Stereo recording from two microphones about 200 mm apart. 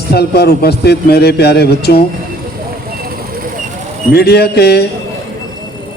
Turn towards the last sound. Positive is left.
turn(degrees=55)  # may be behind; listen again after turning